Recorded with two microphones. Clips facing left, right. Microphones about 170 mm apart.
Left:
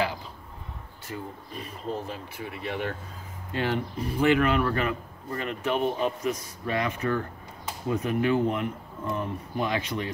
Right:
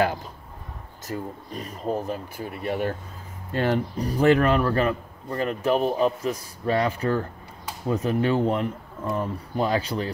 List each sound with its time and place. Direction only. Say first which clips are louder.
1.0 s a man's voice: right 5 dB; 40° right (ahead or behind)